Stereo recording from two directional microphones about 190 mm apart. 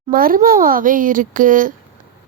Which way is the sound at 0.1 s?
50° right (ahead or behind).